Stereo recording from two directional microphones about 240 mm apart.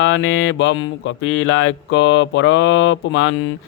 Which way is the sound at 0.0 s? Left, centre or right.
Left.